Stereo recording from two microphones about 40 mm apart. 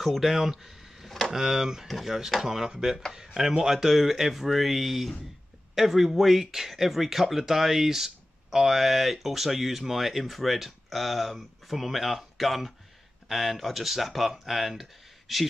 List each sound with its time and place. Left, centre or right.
0.0 s speech: centre